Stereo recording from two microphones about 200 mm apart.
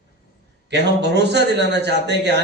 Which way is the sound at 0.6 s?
55° right (ahead or behind).